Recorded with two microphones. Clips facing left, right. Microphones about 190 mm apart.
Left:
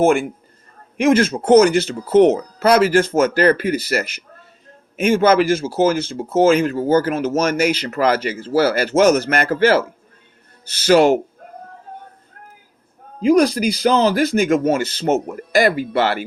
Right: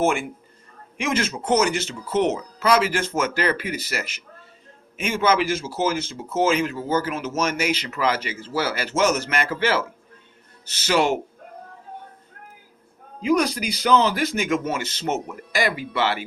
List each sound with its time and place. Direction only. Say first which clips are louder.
1.2 s speech: left 8 dB; 45° left (ahead or behind)
1.7 s speech: left 10 dB; 35° left (ahead or behind)
13.2 s speech: left 7 dB; 35° left (ahead or behind)